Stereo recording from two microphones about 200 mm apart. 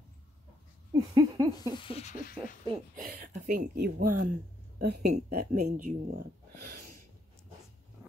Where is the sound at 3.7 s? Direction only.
50° right (ahead or behind).